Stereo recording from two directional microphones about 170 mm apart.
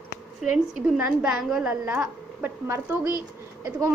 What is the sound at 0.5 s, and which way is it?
A woman's voice, 5° right (ahead or behind).